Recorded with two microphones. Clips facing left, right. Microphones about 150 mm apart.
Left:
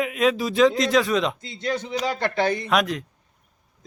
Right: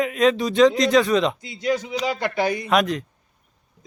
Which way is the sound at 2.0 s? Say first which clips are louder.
Even; 10° right (ahead or behind).